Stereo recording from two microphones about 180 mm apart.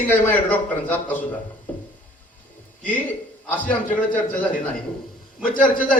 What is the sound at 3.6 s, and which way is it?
A man's voice, 10° left (ahead or behind).